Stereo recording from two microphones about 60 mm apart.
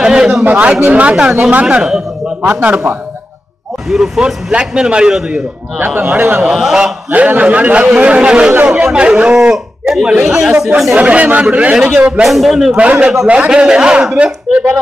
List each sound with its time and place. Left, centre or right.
0.0 s speech: centre
0.5 s a man's voice: right
1.8 s a sound: centre
3.9 s a man's voice: centre
4.5 s speech: centre
5.9 s a man's voice: right
6.4 s speech: centre
7.1 s a man's voice: right; by 10.7 s centre
11.0 s a man's voice: right
12.2 s a man's voice: centre
12.7 s a man's voice: right